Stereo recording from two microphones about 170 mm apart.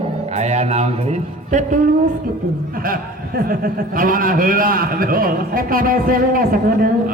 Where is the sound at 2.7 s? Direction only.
55° right (ahead or behind).